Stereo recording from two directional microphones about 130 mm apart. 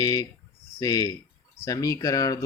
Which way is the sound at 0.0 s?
30° left (ahead or behind).